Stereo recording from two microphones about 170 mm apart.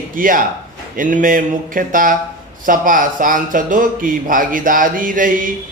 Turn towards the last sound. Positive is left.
turn(degrees=-55)  # may be behind; listen again after turning